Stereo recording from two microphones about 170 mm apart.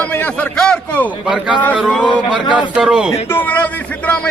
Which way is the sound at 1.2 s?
5° right (ahead or behind).